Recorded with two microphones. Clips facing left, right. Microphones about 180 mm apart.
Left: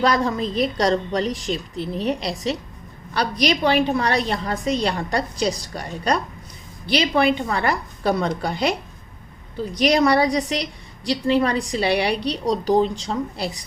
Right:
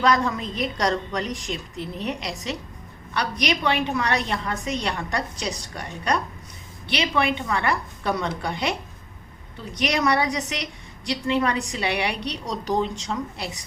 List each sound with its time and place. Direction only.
0.0 s a woman's voice: 35° left (ahead or behind)